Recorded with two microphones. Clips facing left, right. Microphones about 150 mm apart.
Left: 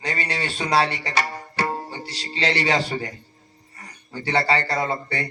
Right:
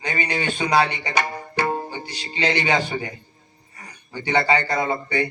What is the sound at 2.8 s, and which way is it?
Speech, 35° left (ahead or behind).